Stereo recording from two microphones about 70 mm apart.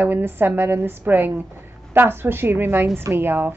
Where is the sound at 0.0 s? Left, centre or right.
Right.